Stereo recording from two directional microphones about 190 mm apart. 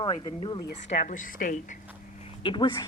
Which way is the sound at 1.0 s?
45° left (ahead or behind).